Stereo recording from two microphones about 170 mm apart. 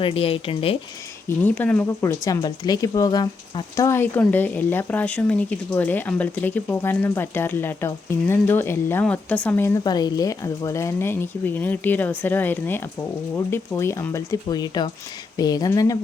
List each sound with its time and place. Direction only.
0.0 s speech: 35° left (ahead or behind)
1.5 s speech: 10° left (ahead or behind)